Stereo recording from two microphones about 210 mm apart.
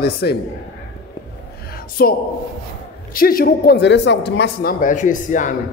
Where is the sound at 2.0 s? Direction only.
45° left (ahead or behind).